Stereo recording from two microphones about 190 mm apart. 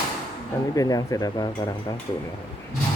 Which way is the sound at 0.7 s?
20° left (ahead or behind).